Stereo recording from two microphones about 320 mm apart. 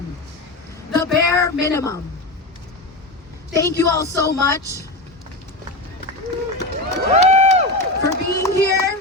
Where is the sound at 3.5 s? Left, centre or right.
Centre.